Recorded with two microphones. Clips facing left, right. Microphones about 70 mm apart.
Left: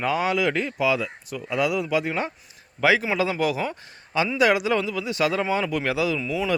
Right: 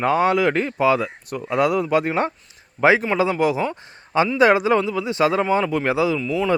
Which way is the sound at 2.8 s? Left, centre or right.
Right.